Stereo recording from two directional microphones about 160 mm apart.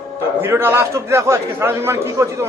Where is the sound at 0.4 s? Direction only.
15° right (ahead or behind).